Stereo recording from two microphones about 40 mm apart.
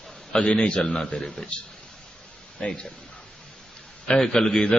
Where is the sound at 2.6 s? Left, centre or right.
Left.